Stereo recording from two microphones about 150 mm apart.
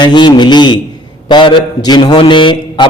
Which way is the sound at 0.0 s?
30° left (ahead or behind).